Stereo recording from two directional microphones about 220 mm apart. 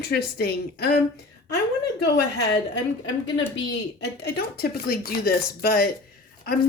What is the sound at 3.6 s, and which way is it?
Speech, 50° left (ahead or behind).